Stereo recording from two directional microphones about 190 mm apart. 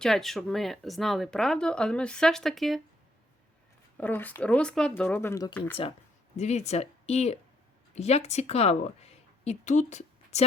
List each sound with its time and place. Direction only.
0.0 s speech: centre (ahead or behind)
3.9 s speech: 10° left (ahead or behind)
6.3 s a woman's voice: 35° left (ahead or behind)